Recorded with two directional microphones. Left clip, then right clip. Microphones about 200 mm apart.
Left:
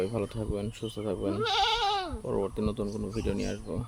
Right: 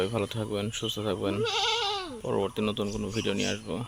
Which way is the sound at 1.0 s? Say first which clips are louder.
Even; 5° left (ahead or behind).